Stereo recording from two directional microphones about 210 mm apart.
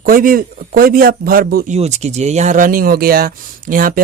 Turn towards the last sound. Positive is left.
turn(degrees=-40)  # may be behind; listen again after turning